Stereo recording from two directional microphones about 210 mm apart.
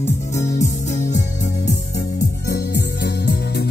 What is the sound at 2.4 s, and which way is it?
Music, 50° left (ahead or behind).